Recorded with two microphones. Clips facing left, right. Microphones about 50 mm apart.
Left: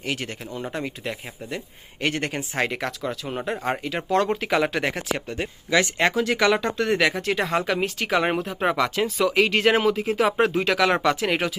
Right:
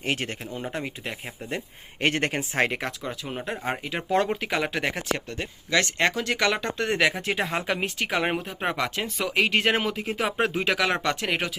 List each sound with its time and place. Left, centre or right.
0.0 s speech: right
0.8 s speech: centre
1.5 s speech: right
2.6 s speech: right
2.8 s speech: centre